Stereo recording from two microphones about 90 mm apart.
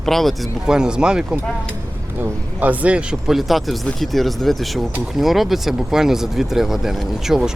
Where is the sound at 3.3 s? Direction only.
Centre (ahead or behind).